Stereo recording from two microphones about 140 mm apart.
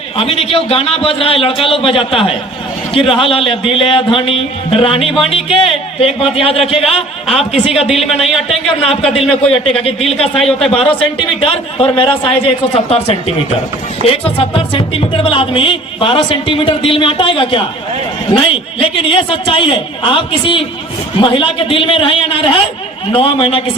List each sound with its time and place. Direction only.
0.2 s a man's voice: 45° left (ahead or behind)
7.9 s speech: centre (ahead or behind)
8.4 s a man's voice: 45° left (ahead or behind)
10.3 s speech: centre (ahead or behind)
10.7 s a man's voice: 40° left (ahead or behind)
18.8 s speech: 40° left (ahead or behind)